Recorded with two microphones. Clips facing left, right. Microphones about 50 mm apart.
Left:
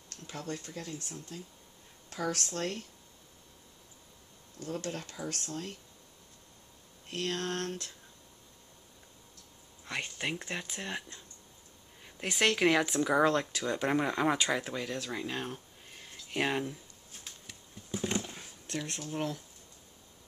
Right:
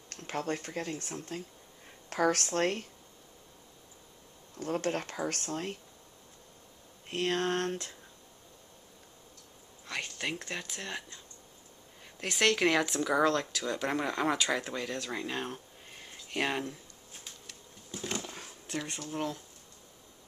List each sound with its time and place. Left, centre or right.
0.1 s speech: right
4.6 s speech: right
7.1 s speech: centre
9.8 s speech: centre
12.2 s speech: centre
15.0 s a sound: centre
16.3 s speech: centre
17.9 s a sound: centre
18.2 s drawer open or close: centre